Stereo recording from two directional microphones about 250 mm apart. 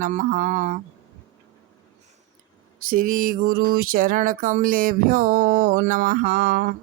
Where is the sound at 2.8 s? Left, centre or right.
Right.